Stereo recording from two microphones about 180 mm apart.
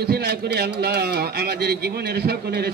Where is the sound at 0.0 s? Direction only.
65° right (ahead or behind).